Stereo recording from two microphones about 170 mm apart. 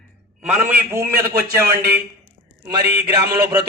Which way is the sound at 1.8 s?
60° right (ahead or behind).